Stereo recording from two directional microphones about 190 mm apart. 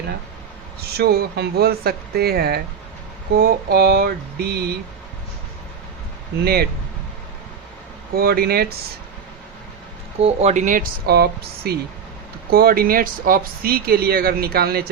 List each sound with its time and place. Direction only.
0.9 s speech: 55° right (ahead or behind)
6.4 s speech: 55° right (ahead or behind)
8.1 s speech: 55° right (ahead or behind)
10.2 s speech: 35° right (ahead or behind); by 14.8 s 55° right (ahead or behind)